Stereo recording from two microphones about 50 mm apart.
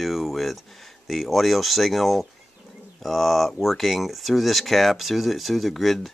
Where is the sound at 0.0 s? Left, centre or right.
Centre.